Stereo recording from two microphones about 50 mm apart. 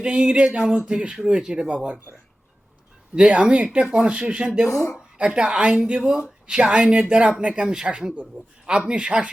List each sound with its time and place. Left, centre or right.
0.0 s speech: centre
3.2 s speech: centre
8.4 s a man's voice: right
8.9 s speech: centre